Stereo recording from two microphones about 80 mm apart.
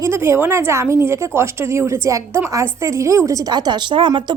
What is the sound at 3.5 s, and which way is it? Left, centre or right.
Speech, right.